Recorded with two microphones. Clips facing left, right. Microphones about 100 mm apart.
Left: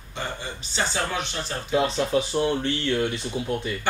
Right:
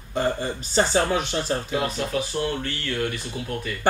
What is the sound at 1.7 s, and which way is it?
Speech, 25° left (ahead or behind).